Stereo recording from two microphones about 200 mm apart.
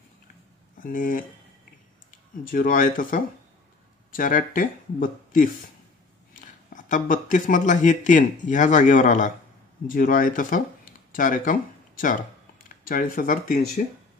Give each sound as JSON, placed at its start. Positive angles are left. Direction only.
{"t": 0.7, "sound": "speech", "side_deg": 45}
{"t": 2.4, "sound": "speech", "side_deg": 45}